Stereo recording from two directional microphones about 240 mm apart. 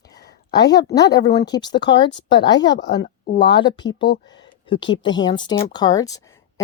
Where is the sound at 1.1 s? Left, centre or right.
Centre.